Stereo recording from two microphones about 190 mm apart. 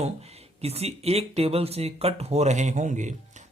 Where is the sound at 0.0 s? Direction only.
35° right (ahead or behind).